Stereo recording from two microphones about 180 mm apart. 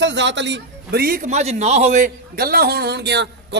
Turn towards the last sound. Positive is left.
turn(degrees=-75)  # may be behind; listen again after turning